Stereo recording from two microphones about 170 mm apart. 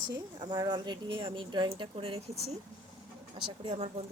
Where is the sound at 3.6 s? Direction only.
30° right (ahead or behind).